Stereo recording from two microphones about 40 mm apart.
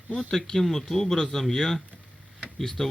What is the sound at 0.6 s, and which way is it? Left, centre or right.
Speech, centre.